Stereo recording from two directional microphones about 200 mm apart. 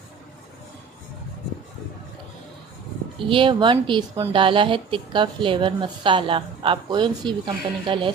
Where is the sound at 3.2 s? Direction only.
25° right (ahead or behind).